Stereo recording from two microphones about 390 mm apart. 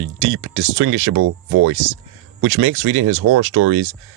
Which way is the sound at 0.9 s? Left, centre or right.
Right.